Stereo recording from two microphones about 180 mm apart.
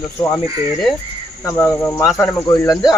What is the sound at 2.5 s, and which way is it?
Speech, 25° left (ahead or behind).